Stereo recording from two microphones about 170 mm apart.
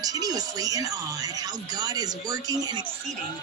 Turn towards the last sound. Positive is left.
turn(degrees=-25)  # may be behind; listen again after turning